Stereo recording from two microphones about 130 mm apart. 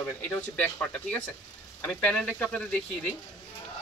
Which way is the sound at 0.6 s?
10° left (ahead or behind).